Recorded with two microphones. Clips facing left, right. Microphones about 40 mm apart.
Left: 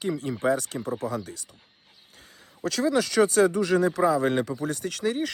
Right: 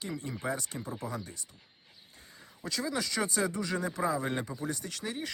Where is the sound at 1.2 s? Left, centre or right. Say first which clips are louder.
Left 5 dB; left.